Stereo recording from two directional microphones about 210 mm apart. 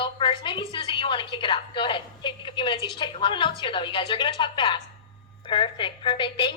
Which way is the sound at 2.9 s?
25° left (ahead or behind).